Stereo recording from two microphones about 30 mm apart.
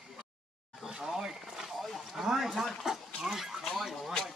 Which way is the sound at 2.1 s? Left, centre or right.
Centre.